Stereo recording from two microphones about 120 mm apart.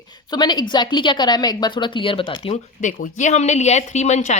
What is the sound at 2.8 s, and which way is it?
Speech, 85° left.